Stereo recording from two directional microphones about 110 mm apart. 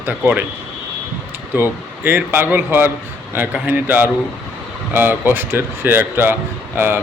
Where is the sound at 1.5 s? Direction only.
20° right (ahead or behind).